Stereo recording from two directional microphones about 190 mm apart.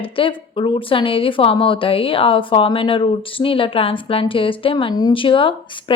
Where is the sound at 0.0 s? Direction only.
25° left (ahead or behind).